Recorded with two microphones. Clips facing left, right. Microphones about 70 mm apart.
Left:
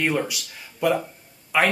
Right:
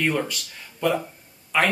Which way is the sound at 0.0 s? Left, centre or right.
Centre.